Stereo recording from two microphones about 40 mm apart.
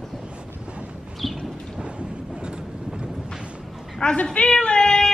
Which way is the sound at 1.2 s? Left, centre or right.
Centre.